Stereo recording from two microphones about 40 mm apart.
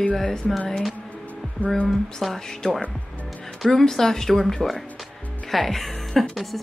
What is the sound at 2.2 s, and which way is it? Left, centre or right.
Speech, centre.